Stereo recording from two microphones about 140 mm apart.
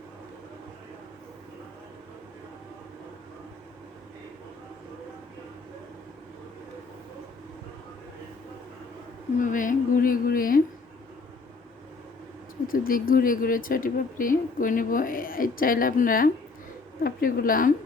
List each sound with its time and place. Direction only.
9.4 s a woman's voice: 70° left (ahead or behind); by 10.6 s 85° left
12.6 s speech: 90° left